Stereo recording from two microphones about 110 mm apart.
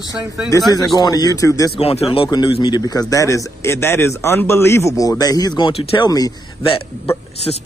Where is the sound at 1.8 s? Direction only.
70° left (ahead or behind).